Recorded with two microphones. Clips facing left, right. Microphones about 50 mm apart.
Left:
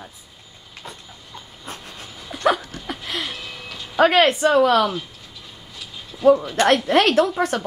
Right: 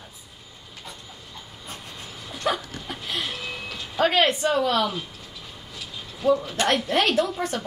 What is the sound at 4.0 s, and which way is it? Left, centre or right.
Speech, left.